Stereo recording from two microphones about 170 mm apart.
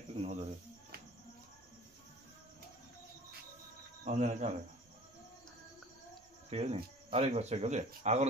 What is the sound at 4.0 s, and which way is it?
Speech, 45° right (ahead or behind).